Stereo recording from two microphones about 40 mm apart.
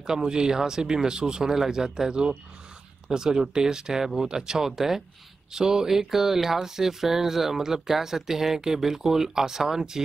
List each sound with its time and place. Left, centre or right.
0.0 s speech: centre